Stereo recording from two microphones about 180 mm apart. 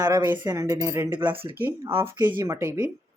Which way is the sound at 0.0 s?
20° right (ahead or behind).